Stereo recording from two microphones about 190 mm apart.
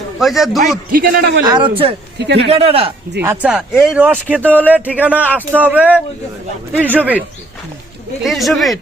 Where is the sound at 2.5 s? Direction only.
30° right (ahead or behind).